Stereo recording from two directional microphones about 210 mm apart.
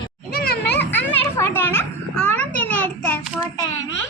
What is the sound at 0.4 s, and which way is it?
Children playing, 50° left (ahead or behind).